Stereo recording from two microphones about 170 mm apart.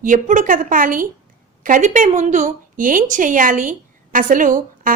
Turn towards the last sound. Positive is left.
turn(degrees=-50)  # may be behind; listen again after turning